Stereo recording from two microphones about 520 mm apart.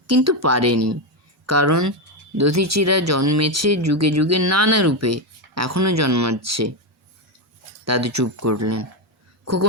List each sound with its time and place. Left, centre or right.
0.1 s speech: right
7.9 s a woman's voice: right